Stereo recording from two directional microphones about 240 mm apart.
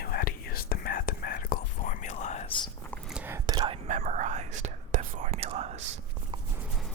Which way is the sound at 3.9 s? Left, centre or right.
Right.